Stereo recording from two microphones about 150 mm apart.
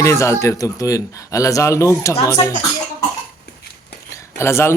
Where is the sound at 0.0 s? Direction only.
20° left (ahead or behind).